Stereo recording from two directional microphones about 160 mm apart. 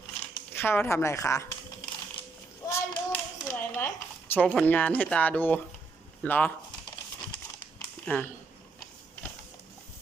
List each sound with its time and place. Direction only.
0.5 s speech: 15° left (ahead or behind)
2.6 s hands: 15° left (ahead or behind)
4.4 s speech: 10° left (ahead or behind)
8.0 s speech: 10° left (ahead or behind)